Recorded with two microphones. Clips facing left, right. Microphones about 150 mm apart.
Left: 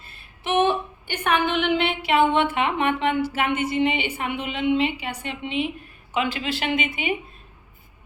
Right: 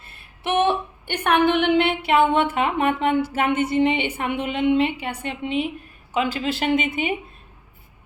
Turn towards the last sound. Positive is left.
turn(degrees=-45)  # may be behind; listen again after turning